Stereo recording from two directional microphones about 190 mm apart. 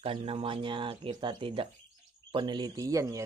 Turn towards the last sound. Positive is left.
turn(degrees=-15)  # may be behind; listen again after turning